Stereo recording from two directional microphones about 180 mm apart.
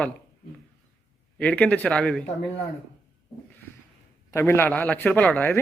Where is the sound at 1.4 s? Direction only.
5° left (ahead or behind).